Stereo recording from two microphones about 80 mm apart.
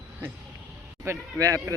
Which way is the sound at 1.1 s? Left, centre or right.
Right.